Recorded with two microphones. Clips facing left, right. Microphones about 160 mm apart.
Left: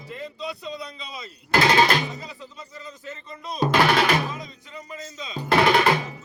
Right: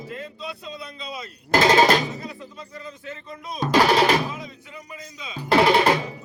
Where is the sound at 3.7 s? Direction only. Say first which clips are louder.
Right 3 dB; 40° right (ahead or behind).